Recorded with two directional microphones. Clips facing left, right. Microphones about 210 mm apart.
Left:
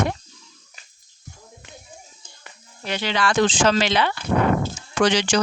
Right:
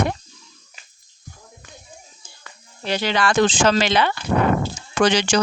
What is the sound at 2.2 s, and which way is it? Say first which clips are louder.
Music: right 1 dB; 10° right (ahead or behind).